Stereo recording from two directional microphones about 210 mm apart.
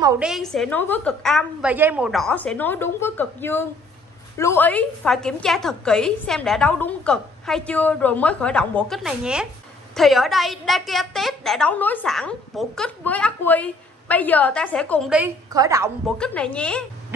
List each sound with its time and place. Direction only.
0.2 s a woman's voice: centre (ahead or behind)
15.5 s a woman's voice: 15° right (ahead or behind)
16.2 s a woman's voice: 5° left (ahead or behind)